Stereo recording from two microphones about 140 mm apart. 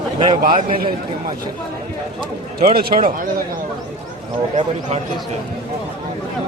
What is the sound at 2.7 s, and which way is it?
Speech, 90° right.